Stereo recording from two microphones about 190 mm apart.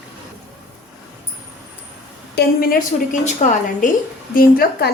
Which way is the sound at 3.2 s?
40° left (ahead or behind).